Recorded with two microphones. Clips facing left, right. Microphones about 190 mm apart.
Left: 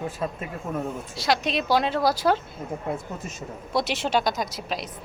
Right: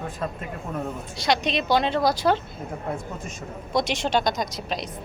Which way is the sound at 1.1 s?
5° left (ahead or behind).